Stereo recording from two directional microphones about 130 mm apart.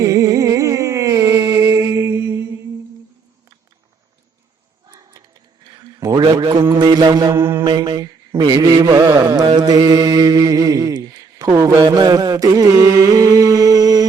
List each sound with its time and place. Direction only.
0.0 s music: 25° right (ahead or behind)
4.9 s a sound: 25° right (ahead or behind)
6.7 s music: 35° right (ahead or behind)
7.3 s mantra: 20° right (ahead or behind)
7.6 s mantra: 35° right (ahead or behind)